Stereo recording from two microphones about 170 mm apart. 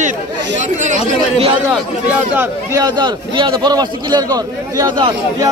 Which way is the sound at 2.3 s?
10° right (ahead or behind).